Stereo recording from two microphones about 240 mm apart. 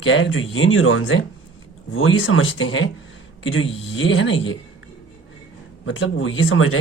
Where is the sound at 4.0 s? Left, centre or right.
Left.